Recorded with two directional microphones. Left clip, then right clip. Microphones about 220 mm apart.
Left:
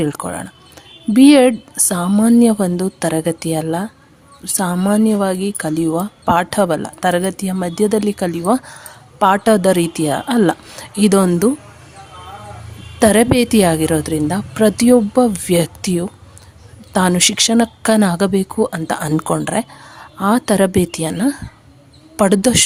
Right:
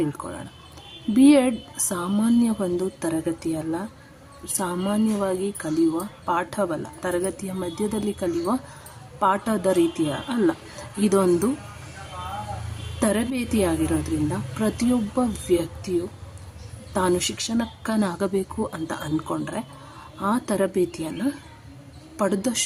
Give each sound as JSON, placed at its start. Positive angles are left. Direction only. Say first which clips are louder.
{"t": 0.0, "sound": "speech", "louder": "left 8 dB", "side_deg": 45}
{"t": 13.0, "sound": "speech", "louder": "left 13 dB", "side_deg": 45}
{"t": 16.9, "sound": "speech", "louder": "left 8 dB", "side_deg": 45}